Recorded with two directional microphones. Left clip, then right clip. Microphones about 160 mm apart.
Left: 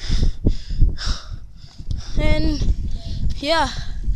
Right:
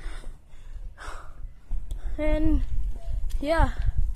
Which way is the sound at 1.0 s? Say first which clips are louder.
Left 8 dB; centre (ahead or behind).